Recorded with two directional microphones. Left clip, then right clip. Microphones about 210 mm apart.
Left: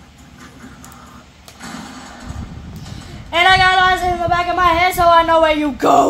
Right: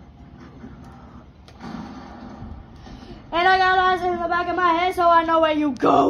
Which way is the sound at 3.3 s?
45° left (ahead or behind).